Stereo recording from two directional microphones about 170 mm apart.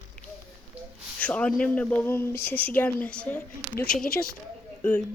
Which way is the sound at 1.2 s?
5° left (ahead or behind).